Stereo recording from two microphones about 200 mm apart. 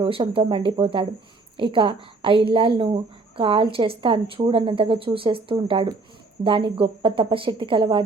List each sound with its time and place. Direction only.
0.0 s a woman's voice: 25° right (ahead or behind)